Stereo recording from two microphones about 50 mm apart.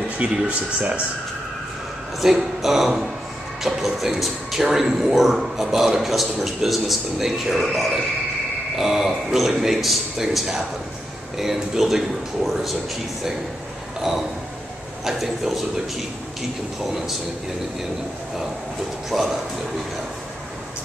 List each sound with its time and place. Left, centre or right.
0.2 s speech: right
2.2 s speech: centre
15.0 s speech: centre
19.0 s speech: centre